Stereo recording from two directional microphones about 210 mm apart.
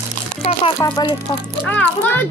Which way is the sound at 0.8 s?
20° left (ahead or behind).